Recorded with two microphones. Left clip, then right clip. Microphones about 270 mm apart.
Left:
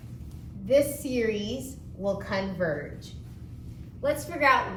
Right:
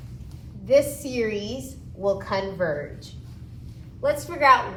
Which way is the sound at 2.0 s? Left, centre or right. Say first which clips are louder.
Right 5 dB; centre.